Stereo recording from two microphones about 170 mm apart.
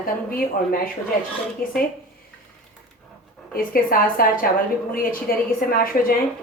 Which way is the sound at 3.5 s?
60° left (ahead or behind).